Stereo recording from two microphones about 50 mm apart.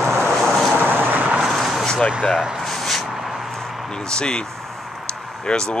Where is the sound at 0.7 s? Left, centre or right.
Right.